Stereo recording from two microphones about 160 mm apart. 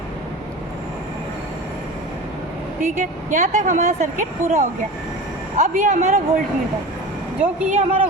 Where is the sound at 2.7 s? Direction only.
55° right (ahead or behind).